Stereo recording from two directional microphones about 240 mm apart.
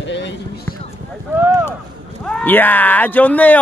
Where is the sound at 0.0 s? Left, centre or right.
Left.